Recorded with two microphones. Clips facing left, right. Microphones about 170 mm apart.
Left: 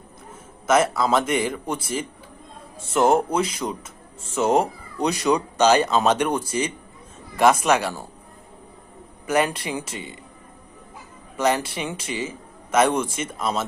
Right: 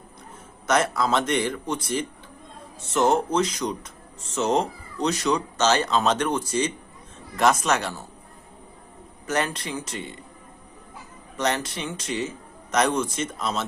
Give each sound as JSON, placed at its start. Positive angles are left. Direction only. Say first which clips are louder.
{"t": 0.7, "sound": "speech", "louder": "left 3 dB", "side_deg": 5}
{"t": 2.9, "sound": "speech", "louder": "left 2 dB", "side_deg": 10}
{"t": 9.2, "sound": "speech", "louder": "left 4 dB", "side_deg": 10}
{"t": 11.3, "sound": "speech", "louder": "left 4 dB", "side_deg": 10}